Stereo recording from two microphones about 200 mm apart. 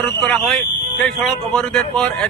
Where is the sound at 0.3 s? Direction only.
Centre (ahead or behind).